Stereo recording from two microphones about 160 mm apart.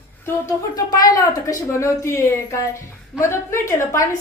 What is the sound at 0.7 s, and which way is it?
A woman's voice, 25° left (ahead or behind).